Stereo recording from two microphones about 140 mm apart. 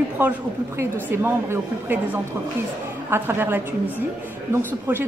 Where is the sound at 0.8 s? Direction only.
15° right (ahead or behind).